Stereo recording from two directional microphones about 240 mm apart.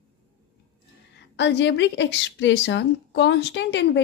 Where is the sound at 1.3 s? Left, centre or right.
Left.